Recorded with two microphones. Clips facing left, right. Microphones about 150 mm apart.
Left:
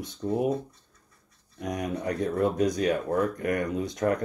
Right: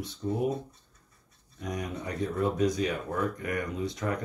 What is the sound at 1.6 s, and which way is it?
Speech, 45° left (ahead or behind).